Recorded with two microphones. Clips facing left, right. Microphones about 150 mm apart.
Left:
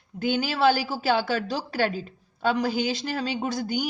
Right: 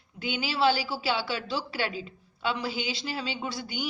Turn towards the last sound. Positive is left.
turn(degrees=45)  # may be behind; listen again after turning